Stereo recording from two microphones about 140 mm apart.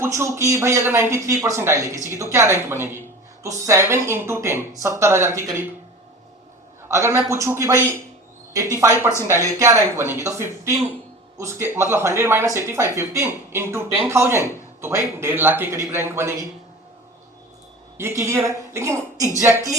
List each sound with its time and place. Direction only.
0.0 s speech: 20° right (ahead or behind)
6.8 s a man's voice: 20° right (ahead or behind)
17.9 s speech: 20° right (ahead or behind)